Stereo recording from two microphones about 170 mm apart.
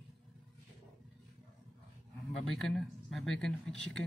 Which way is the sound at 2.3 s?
Centre (ahead or behind).